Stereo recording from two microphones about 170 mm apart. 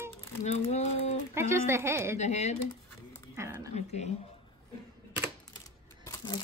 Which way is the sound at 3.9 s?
40° left (ahead or behind).